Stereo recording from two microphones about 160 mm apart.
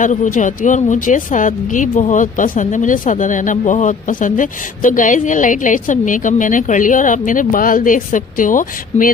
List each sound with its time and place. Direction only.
0.0 s speech: 50° left (ahead or behind)